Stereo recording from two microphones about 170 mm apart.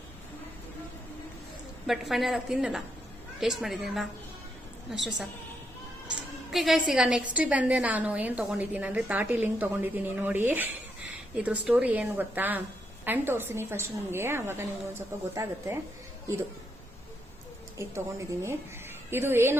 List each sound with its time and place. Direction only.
1.9 s a woman's voice: centre (ahead or behind)
6.5 s a woman's voice: centre (ahead or behind)
17.7 s a woman's voice: 15° right (ahead or behind)